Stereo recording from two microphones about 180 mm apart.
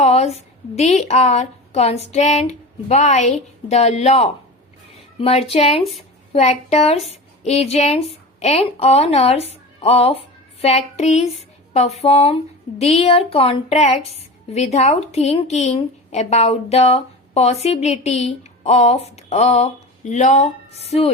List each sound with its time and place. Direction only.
0.0 s a woman's voice: 35° left (ahead or behind)